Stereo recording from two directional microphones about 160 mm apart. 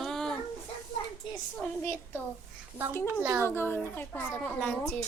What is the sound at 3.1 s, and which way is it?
Speech, 15° right (ahead or behind).